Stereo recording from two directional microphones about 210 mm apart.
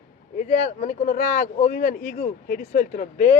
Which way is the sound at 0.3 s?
40° left (ahead or behind).